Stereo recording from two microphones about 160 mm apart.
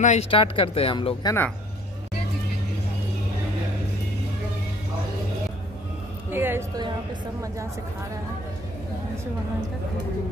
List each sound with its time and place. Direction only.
0.0 s speech: 45° left (ahead or behind)
1.2 s speech: 15° left (ahead or behind)
6.3 s a sound: 15° right (ahead or behind)